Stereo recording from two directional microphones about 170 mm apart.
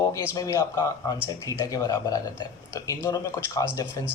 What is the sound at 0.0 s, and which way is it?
Speech, 20° left (ahead or behind).